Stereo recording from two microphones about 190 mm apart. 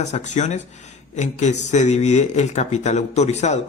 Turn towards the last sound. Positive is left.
turn(degrees=35)  # may be behind; listen again after turning